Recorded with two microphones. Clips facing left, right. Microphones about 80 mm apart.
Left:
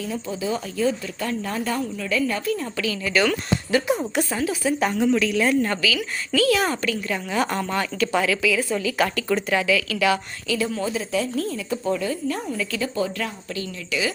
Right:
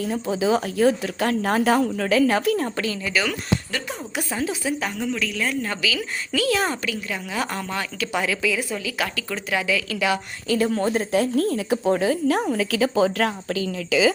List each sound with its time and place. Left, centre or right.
0.0 s speech: right
2.7 s speech: right
3.7 s speech: centre
4.1 s speech: centre
4.8 s a woman's voice: centre
6.3 s speech: right
6.7 s a woman's voice: centre
8.2 s speech: right
8.7 s a woman's voice: centre
9.6 s speech: centre
10.5 s speech: right